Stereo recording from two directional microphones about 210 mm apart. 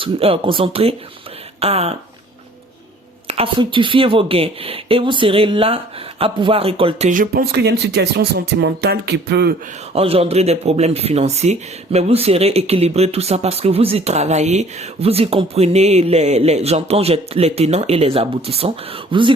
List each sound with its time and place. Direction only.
0.0 s speech: 25° right (ahead or behind)
3.2 s speech: 25° right (ahead or behind)
7.1 s speech: 40° right (ahead or behind)
9.9 s speech: 25° right (ahead or behind)